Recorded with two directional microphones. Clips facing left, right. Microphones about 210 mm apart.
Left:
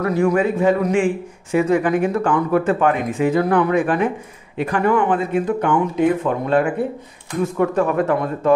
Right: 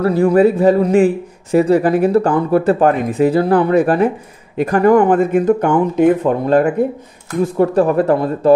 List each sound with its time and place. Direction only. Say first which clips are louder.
0.0 s a man's voice: right 6 dB; 30° right (ahead or behind)